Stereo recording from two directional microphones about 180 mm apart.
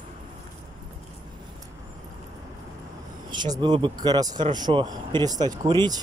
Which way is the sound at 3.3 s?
25° right (ahead or behind).